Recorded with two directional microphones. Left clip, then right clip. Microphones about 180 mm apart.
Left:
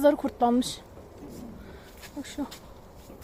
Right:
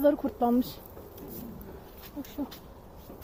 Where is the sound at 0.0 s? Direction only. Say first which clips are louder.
Left 3 dB; 5° left (ahead or behind).